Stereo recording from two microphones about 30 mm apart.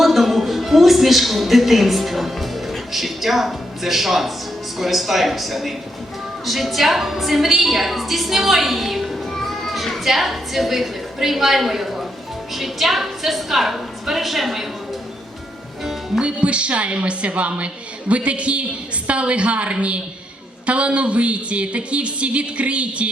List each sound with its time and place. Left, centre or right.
0.0 s a sound: centre
4.8 s a woman's voice: centre
9.4 s a woman's voice: centre
15.8 s music: centre
16.2 s a woman's voice: right